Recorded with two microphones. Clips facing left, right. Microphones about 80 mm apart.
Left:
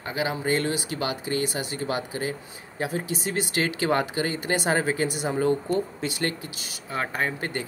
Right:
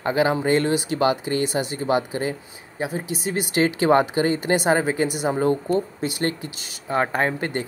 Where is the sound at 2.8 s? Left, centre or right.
Centre.